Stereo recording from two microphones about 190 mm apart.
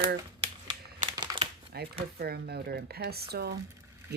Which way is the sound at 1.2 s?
25° right (ahead or behind).